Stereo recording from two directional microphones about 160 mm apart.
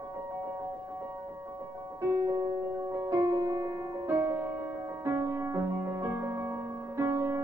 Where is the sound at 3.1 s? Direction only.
20° right (ahead or behind).